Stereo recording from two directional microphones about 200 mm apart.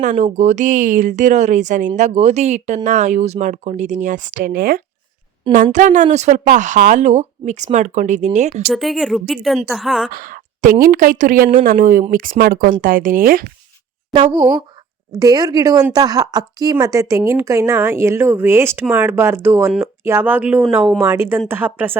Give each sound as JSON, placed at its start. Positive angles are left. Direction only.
{"t": 0.0, "sound": "a woman's voice", "side_deg": -40}
{"t": 8.7, "sound": "a woman's voice", "side_deg": 0}
{"t": 10.1, "sound": "a woman's voice", "side_deg": -45}
{"t": 14.1, "sound": "speech", "side_deg": -25}
{"t": 21.0, "sound": "speech", "side_deg": -10}